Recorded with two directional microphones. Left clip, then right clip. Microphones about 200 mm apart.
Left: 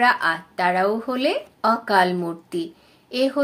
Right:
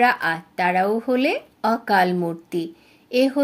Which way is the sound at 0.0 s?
45° right (ahead or behind).